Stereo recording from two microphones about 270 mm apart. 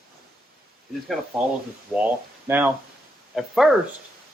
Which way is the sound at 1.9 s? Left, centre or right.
Centre.